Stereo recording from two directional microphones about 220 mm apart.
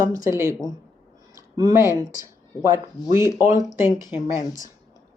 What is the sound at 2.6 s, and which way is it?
Speech, 15° right (ahead or behind).